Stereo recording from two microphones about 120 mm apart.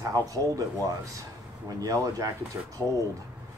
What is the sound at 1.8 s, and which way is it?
Speech, 30° right (ahead or behind).